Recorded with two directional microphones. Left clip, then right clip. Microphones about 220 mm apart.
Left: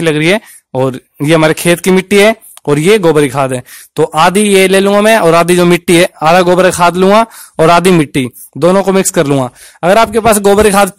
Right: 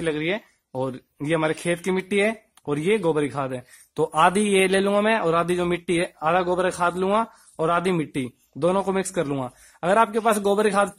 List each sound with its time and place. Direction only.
0.0 s speech: 45° left (ahead or behind)